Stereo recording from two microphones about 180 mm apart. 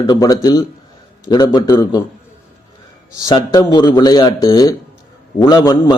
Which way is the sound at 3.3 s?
25° left (ahead or behind).